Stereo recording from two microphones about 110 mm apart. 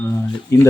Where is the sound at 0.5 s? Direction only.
25° left (ahead or behind).